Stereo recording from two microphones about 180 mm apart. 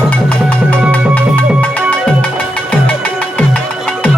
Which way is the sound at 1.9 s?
10° left (ahead or behind).